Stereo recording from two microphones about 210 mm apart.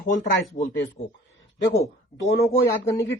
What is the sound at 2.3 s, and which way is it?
Speech, 45° left (ahead or behind).